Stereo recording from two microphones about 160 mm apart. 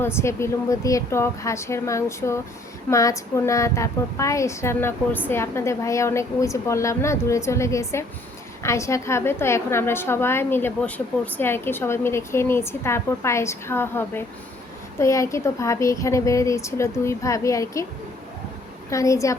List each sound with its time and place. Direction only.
0.0 s a woman's voice: 15° left (ahead or behind)
18.9 s speech: 20° left (ahead or behind)